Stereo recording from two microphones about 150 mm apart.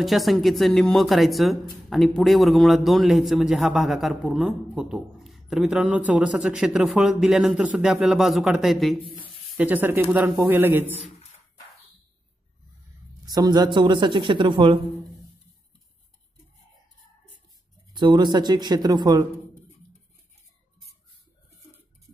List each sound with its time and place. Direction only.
0.0 s speech: centre (ahead or behind)
9.2 s a sound: 10° right (ahead or behind)
10.1 s a man's voice: 10° right (ahead or behind)
13.2 s a woman's voice: 25° right (ahead or behind)
17.9 s speech: 30° right (ahead or behind)